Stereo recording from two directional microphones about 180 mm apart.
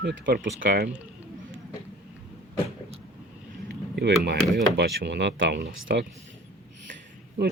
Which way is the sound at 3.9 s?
65° right (ahead or behind).